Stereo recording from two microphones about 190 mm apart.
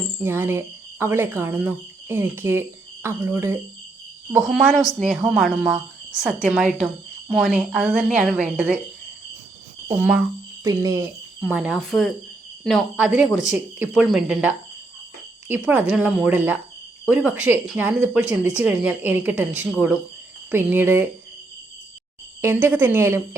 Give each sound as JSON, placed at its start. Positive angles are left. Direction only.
{"t": 0.2, "sound": "a woman's voice", "side_deg": -10}
{"t": 10.0, "sound": "speech", "side_deg": -5}
{"t": 10.6, "sound": "speech", "side_deg": -20}
{"t": 11.3, "sound": "a woman's voice", "side_deg": -5}
{"t": 22.4, "sound": "speech", "side_deg": -10}